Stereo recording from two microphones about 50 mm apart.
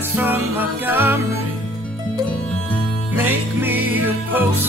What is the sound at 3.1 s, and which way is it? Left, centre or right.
Music, right.